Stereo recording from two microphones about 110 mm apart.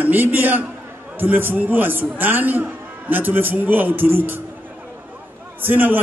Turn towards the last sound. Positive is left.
turn(degrees=-15)  # may be behind; listen again after turning